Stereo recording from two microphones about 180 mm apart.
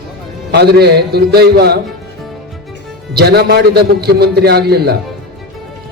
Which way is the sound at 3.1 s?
65° right (ahead or behind).